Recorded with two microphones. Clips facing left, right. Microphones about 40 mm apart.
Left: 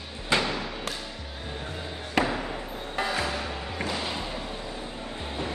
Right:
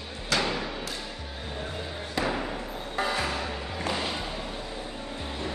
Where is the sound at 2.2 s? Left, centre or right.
Centre.